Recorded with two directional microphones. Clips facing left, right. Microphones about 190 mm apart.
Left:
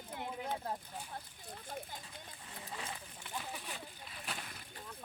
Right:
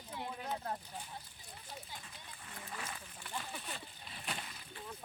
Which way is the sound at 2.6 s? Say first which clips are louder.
Left 1 dB; 20° left (ahead or behind).